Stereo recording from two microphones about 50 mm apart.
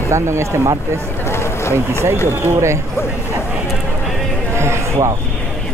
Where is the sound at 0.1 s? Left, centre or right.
Right.